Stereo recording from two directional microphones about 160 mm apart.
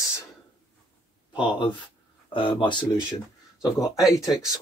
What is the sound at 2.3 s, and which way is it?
Speech, 30° left (ahead or behind).